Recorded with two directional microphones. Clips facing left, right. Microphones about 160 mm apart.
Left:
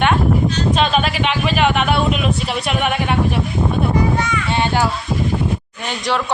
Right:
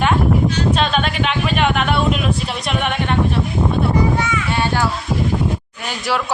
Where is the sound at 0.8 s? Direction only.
Centre (ahead or behind).